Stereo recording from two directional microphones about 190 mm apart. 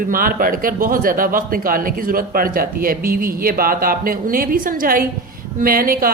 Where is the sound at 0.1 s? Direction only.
50° right (ahead or behind).